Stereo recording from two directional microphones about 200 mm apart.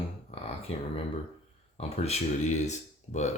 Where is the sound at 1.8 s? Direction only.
35° left (ahead or behind).